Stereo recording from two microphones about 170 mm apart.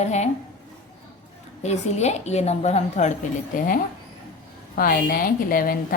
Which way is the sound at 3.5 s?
50° left (ahead or behind).